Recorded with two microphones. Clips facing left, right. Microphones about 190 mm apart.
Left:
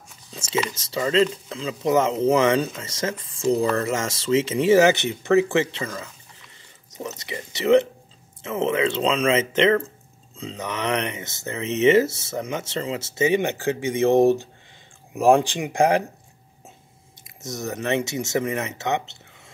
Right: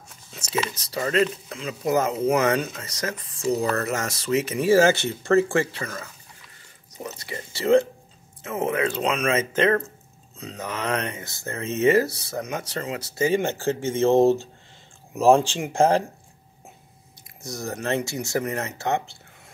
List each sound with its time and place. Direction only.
0.3 s a sound: 25° left (ahead or behind)
0.7 s speech: 25° left (ahead or behind)
7.1 s speech: 20° left (ahead or behind)
17.4 s speech: 20° left (ahead or behind)